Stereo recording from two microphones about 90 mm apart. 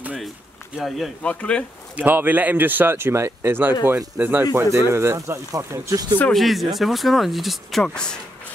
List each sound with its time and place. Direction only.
0.7 s speech: centre (ahead or behind)
1.2 s speech: 15° left (ahead or behind)
2.0 s speech: 20° right (ahead or behind)
4.6 s speech: 35° right (ahead or behind)
6.3 s speech: centre (ahead or behind)